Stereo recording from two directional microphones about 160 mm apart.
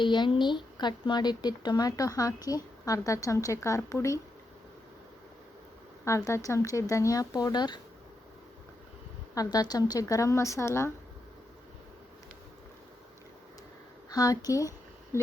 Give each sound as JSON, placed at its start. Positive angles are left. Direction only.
{"t": 0.0, "sound": "speech", "side_deg": 30}
{"t": 6.1, "sound": "speech", "side_deg": 20}
{"t": 9.3, "sound": "speech", "side_deg": 25}
{"t": 14.1, "sound": "speech", "side_deg": 20}
{"t": 15.1, "sound": "a sound", "side_deg": 15}